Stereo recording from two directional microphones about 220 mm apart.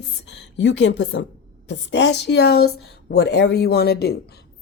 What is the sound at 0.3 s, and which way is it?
A woman's voice, 50° left (ahead or behind).